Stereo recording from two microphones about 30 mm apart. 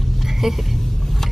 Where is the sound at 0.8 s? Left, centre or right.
Centre.